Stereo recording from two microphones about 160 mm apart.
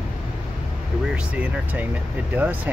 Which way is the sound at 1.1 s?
10° right (ahead or behind).